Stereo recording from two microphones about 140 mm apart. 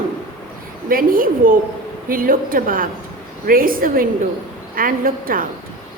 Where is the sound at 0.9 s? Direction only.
90° right.